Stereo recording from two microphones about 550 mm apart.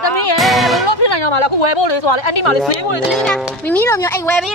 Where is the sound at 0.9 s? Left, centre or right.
Left.